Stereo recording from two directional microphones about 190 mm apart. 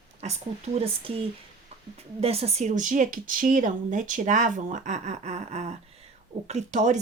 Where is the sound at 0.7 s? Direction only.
30° right (ahead or behind).